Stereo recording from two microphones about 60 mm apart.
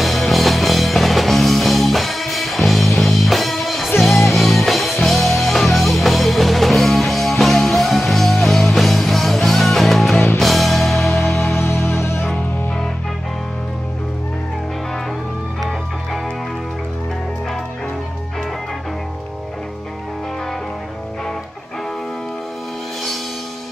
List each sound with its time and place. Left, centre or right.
0.0 s music: centre
11.6 s music: left